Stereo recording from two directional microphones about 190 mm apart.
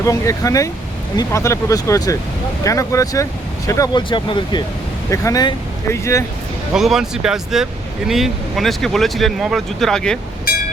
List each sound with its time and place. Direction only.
0.0 s speech: 15° left (ahead or behind)
6.7 s speech: centre (ahead or behind)